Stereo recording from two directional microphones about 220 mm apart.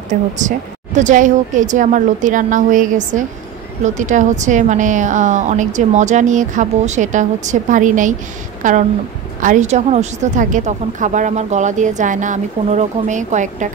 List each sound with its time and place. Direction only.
0.1 s speech: 35° right (ahead or behind)